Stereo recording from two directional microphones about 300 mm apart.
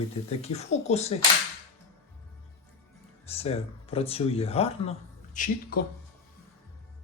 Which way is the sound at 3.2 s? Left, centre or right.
Centre.